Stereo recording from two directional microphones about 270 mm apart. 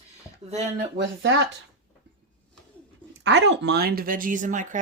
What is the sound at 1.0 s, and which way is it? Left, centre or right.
Speech, right.